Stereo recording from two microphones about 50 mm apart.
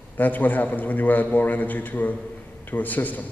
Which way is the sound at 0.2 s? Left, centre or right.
Left.